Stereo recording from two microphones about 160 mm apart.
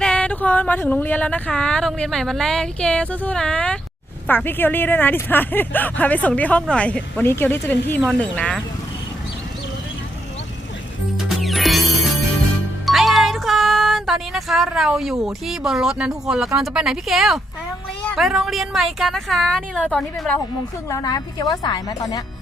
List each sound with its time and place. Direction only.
0.0 s a woman's voice: 5° left (ahead or behind)
11.2 s music: centre (ahead or behind)
12.8 s music: centre (ahead or behind)
16.6 s a woman's voice: 5° right (ahead or behind)
20.9 s a woman's voice: 25° left (ahead or behind)